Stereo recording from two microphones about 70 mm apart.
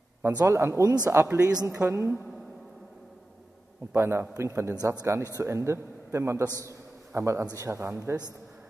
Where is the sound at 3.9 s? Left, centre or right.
Right.